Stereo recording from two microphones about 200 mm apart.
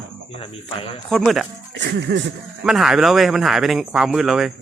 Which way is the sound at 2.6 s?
Centre (ahead or behind).